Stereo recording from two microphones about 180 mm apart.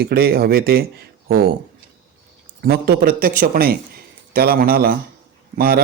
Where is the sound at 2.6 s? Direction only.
60° right (ahead or behind).